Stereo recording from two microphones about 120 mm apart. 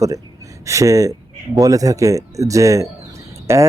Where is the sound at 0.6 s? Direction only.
25° right (ahead or behind).